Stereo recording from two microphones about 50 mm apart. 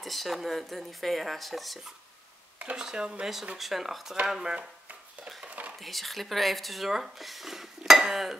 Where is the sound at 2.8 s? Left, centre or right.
Centre.